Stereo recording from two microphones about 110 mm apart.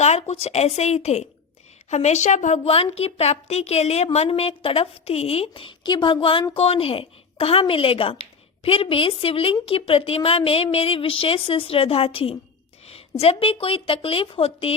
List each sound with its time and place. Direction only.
0.0 s a woman's voice: 75° left (ahead or behind); by 14.8 s 60° left (ahead or behind)